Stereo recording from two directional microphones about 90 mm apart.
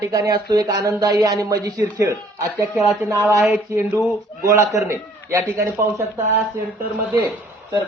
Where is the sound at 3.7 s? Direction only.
30° right (ahead or behind).